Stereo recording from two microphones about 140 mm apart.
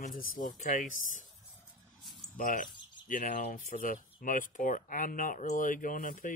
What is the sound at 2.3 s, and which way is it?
Speech, 75° left (ahead or behind).